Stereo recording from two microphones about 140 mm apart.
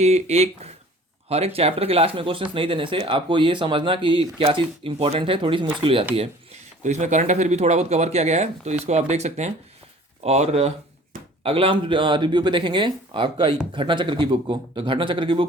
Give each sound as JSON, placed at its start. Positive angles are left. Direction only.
{"t": 0.0, "sound": "speech", "side_deg": -50}
{"t": 6.8, "sound": "speech", "side_deg": -60}
{"t": 11.4, "sound": "speech", "side_deg": -40}